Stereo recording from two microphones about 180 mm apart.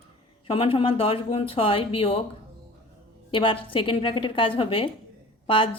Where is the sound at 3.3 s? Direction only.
30° left (ahead or behind).